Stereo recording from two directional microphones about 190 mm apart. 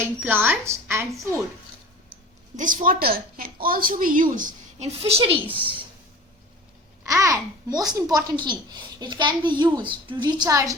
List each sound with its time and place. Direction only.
0.0 s speech: 10° right (ahead or behind)
2.6 s a woman's voice: 45° right (ahead or behind)
7.0 s a child's voice: 15° right (ahead or behind)